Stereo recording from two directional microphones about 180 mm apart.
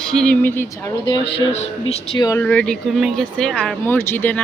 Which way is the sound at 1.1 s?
30° left (ahead or behind).